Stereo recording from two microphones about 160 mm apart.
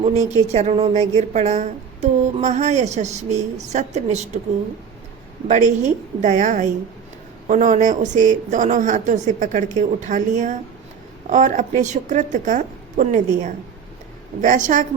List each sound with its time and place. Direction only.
0.0 s a woman's voice: 45° right (ahead or behind)
5.5 s a woman's voice: 50° right (ahead or behind)